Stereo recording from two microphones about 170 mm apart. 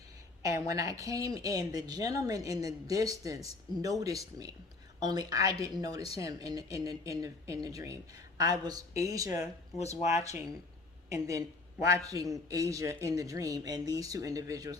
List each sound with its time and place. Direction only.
0.4 s speech: 20° right (ahead or behind)
11.1 s speech: 20° right (ahead or behind)